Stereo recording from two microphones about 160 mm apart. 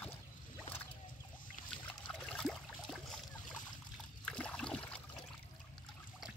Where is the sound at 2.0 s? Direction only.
5° left (ahead or behind).